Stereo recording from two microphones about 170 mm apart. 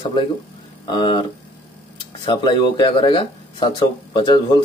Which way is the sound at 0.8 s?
25° left (ahead or behind).